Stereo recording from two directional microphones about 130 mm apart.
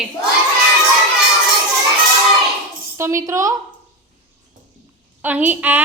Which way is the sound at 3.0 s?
20° right (ahead or behind).